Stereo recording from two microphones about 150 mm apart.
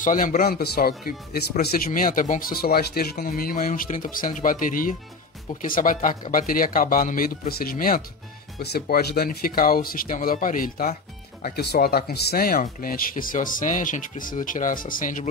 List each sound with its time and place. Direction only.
0.0 s speech: 65° left (ahead or behind); by 1.4 s 85° left
1.9 s speech: 65° left (ahead or behind)
8.5 s speech: 90° left; by 11.0 s 65° left (ahead or behind)
11.4 s speech: 90° left; by 15.2 s 65° left (ahead or behind)